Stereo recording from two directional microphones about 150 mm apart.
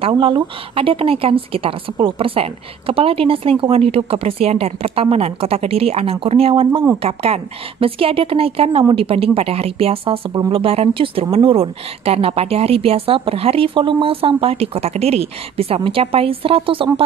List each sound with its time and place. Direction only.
0.0 s speech: 35° right (ahead or behind)